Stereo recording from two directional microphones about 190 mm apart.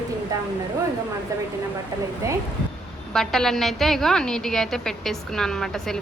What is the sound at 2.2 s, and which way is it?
Speech, 15° right (ahead or behind).